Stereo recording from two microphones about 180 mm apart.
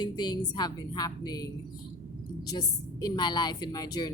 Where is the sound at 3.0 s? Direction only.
25° left (ahead or behind).